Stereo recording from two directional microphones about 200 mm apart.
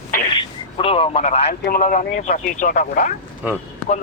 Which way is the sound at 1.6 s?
45° left (ahead or behind).